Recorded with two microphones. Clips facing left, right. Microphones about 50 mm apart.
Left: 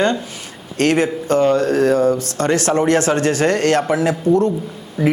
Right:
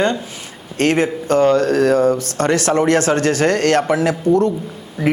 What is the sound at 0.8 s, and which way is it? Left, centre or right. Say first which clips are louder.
Speech: even; right.